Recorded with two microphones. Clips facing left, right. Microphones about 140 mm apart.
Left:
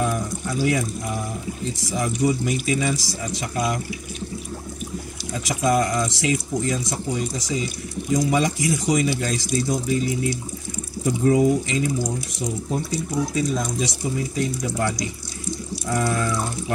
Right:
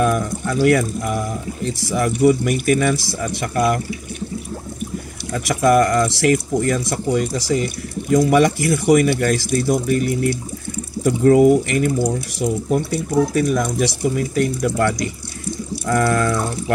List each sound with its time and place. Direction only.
0.0 s speech: 70° right (ahead or behind)
5.3 s speech: 65° right (ahead or behind)